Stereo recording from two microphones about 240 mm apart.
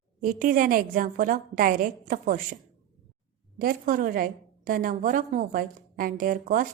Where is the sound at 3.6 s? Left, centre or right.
Right.